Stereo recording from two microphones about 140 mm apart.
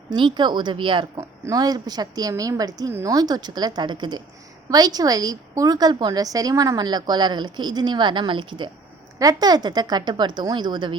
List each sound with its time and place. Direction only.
0.1 s a woman's voice: 35° right (ahead or behind)